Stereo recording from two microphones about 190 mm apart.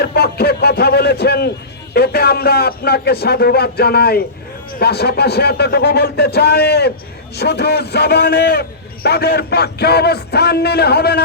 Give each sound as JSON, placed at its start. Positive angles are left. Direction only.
{"t": 0.0, "sound": "a man's voice", "side_deg": 55}